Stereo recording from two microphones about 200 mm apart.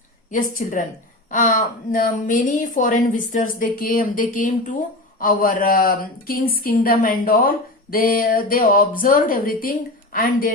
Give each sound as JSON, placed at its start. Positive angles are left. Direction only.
{"t": 0.3, "sound": "a woman's voice", "side_deg": 40}